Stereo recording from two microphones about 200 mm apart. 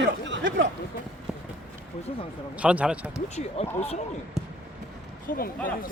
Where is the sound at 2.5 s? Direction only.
5° right (ahead or behind).